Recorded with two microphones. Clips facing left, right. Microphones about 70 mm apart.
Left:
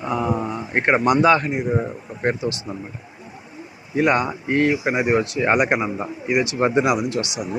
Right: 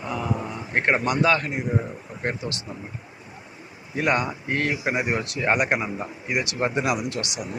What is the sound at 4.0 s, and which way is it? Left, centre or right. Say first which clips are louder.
Speech: left 5 dB; centre.